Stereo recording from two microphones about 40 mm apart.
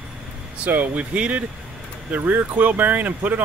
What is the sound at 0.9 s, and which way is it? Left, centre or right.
Speech, right.